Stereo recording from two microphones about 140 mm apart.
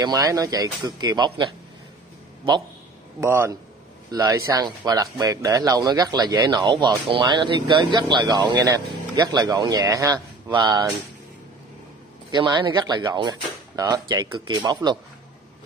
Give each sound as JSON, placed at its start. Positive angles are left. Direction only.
{"t": 0.0, "sound": "speech", "side_deg": -25}
{"t": 3.2, "sound": "speech", "side_deg": -20}
{"t": 4.1, "sound": "speech", "side_deg": -30}
{"t": 12.3, "sound": "speech", "side_deg": -30}